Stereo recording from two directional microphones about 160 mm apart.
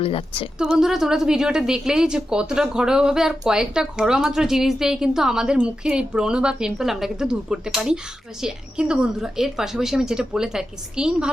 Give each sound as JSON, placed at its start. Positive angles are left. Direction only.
{"t": 0.0, "sound": "a woman's voice", "side_deg": 35}
{"t": 0.6, "sound": "a woman's voice", "side_deg": -5}